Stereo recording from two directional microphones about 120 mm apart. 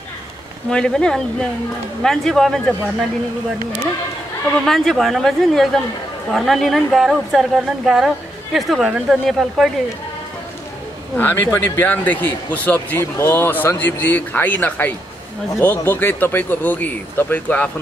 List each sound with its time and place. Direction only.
0.7 s a man's voice: 5° left (ahead or behind)
4.6 s a woman's voice: 5° left (ahead or behind)
11.1 s a man's voice: 15° left (ahead or behind)